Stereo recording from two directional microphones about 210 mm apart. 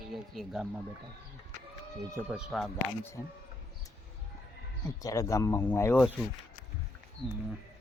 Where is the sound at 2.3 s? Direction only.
Centre (ahead or behind).